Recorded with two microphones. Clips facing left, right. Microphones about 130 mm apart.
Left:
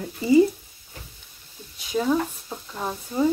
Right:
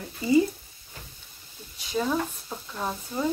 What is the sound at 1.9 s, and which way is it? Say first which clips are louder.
Speech: left 4 dB; 5° left (ahead or behind).